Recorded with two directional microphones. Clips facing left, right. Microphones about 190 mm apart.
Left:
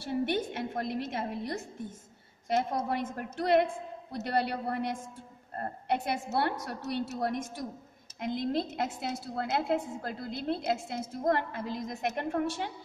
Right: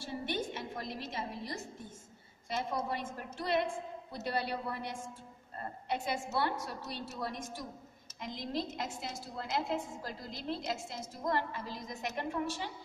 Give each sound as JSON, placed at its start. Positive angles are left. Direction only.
{"t": 0.0, "sound": "a woman's voice", "side_deg": 60}